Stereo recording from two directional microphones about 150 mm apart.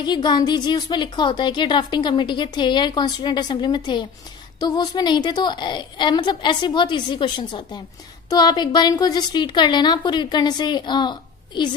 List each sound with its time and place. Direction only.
0.0 s a woman's voice: 30° left (ahead or behind)